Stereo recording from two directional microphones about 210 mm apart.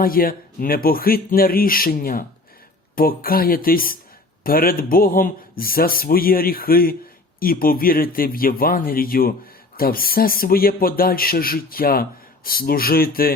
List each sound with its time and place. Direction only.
0.0 s speech: 45° left (ahead or behind)